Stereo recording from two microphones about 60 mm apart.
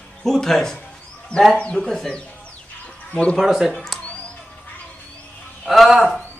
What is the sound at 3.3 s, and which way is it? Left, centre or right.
Speech, centre.